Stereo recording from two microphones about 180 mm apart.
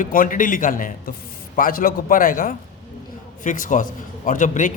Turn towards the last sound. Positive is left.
turn(degrees=45)  # may be behind; listen again after turning